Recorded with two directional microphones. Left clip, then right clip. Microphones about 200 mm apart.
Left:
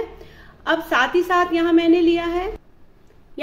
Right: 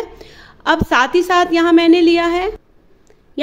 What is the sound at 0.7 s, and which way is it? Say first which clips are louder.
A woman's voice: right 5 dB; 55° right (ahead or behind).